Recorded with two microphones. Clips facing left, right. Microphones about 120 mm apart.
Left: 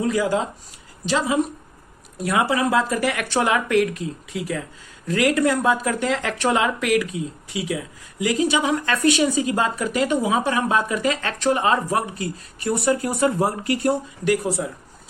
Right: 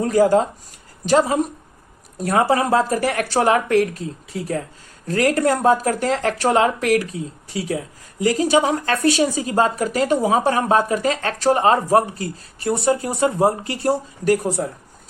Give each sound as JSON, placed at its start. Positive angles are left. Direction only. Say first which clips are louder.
{"t": 0.0, "sound": "speech", "louder": "right 6 dB", "side_deg": -45}